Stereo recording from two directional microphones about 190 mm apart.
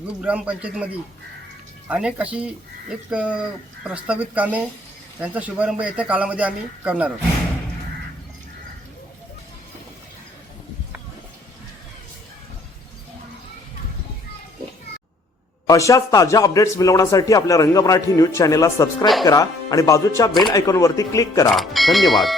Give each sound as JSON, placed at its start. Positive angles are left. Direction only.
{"t": 0.2, "sound": "speech", "side_deg": -5}
{"t": 1.9, "sound": "speech", "side_deg": -5}
{"t": 15.6, "sound": "speech", "side_deg": 15}
{"t": 21.5, "sound": "speech", "side_deg": 0}